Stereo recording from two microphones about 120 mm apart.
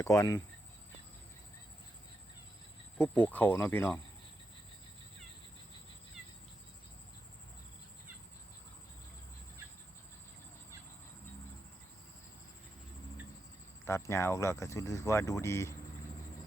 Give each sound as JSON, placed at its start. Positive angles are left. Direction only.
{"t": 0.0, "sound": "speech", "side_deg": 25}
{"t": 3.0, "sound": "speech", "side_deg": 15}
{"t": 13.8, "sound": "speech", "side_deg": 20}